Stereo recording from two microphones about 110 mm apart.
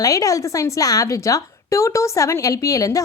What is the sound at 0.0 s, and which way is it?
Speech, 30° left (ahead or behind).